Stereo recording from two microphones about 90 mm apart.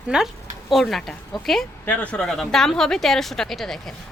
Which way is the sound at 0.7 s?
Centre (ahead or behind).